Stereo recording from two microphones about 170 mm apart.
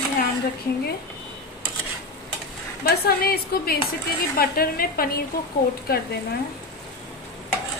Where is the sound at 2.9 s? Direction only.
65° left (ahead or behind).